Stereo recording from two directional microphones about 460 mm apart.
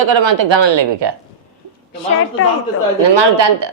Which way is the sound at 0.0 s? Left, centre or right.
Right.